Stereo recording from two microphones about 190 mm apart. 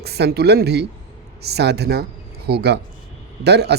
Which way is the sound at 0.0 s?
60° right (ahead or behind).